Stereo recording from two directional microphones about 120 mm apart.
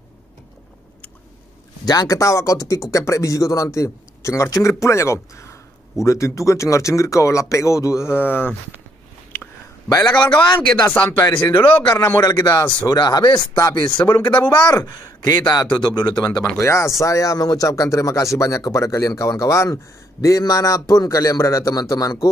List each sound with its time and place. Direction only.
1.9 s speech: 30° left (ahead or behind)
10.0 s speech: 10° left (ahead or behind)
12.2 s speech: 30° left (ahead or behind)
14.0 s speech: 15° left (ahead or behind)
14.3 s speech: 40° left (ahead or behind)
16.4 s speech: 20° left (ahead or behind)